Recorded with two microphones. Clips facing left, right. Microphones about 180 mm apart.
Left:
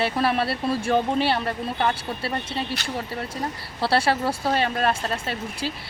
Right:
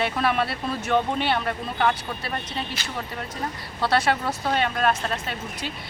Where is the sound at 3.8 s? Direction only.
30° left (ahead or behind).